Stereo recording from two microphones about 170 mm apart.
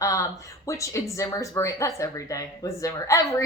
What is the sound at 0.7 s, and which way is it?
A woman's voice, 20° left (ahead or behind).